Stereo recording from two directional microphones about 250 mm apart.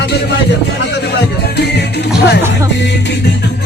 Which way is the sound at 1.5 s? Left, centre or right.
Left.